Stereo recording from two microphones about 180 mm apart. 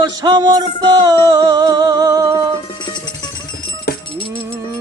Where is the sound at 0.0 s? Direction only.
25° right (ahead or behind).